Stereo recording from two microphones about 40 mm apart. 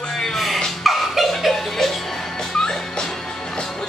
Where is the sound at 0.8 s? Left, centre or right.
Centre.